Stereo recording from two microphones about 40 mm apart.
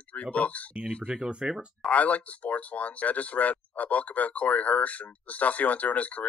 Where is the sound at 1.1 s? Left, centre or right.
Centre.